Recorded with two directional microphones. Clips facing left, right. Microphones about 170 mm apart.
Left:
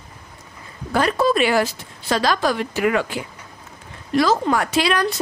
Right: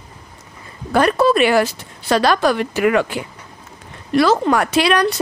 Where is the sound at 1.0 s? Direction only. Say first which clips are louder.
Right 4 dB; 65° right (ahead or behind).